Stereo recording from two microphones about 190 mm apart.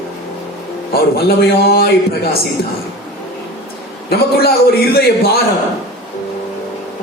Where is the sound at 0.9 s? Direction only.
55° left (ahead or behind).